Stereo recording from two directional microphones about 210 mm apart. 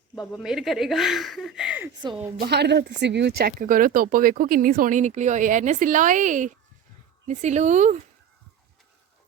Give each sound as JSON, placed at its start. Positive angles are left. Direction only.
{"t": 0.2, "sound": "speech", "side_deg": 0}
{"t": 2.4, "sound": "speech", "side_deg": -50}